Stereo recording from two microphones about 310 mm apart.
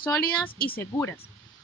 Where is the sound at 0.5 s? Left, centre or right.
Left.